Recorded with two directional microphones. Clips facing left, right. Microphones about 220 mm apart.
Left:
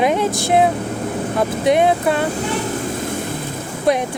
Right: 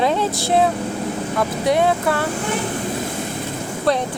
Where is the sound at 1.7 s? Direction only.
20° left (ahead or behind).